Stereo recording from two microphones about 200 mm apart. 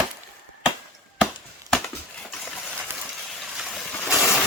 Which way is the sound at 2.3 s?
Centre (ahead or behind).